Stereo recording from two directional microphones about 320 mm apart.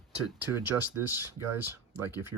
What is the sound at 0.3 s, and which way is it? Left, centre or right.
Speech, centre.